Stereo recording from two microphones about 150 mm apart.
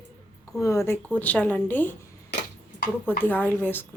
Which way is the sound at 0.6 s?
20° left (ahead or behind).